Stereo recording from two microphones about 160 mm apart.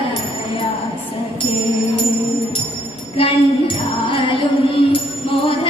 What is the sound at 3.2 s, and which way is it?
Music, 35° left (ahead or behind).